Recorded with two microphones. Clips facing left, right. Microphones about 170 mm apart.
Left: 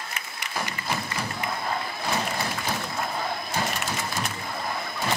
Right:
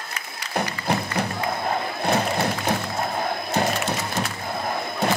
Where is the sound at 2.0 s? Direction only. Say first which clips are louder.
Right 9 dB; 60° right (ahead or behind).